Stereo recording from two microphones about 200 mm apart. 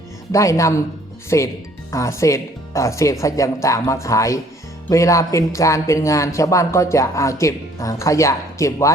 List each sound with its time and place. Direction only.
0.3 s speech: 15° left (ahead or behind)